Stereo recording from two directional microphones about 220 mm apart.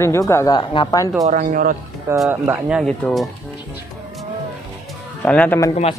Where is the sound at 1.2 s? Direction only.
40° right (ahead or behind).